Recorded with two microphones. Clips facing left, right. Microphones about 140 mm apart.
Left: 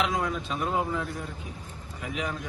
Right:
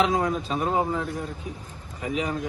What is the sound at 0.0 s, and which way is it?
A man's voice, 35° right (ahead or behind).